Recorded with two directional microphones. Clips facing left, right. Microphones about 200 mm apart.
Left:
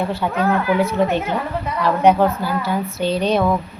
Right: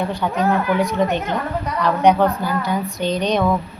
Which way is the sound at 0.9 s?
5° left (ahead or behind).